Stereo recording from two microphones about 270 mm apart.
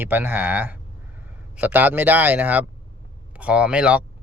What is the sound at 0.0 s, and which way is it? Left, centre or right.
Speech, centre.